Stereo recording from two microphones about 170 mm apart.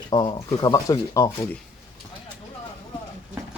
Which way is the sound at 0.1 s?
30° left (ahead or behind).